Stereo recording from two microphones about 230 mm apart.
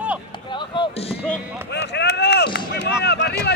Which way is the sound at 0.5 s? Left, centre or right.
Left.